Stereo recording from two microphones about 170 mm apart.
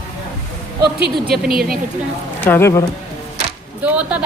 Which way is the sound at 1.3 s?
60° right (ahead or behind).